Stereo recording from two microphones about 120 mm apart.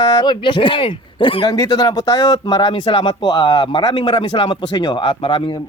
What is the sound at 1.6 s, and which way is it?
Speech, 30° left (ahead or behind).